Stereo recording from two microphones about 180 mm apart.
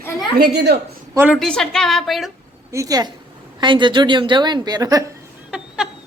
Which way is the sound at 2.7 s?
20° right (ahead or behind).